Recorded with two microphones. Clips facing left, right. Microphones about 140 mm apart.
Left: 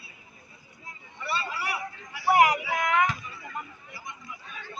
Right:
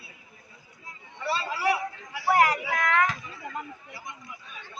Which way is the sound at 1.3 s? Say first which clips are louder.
Right 5 dB; 90° right.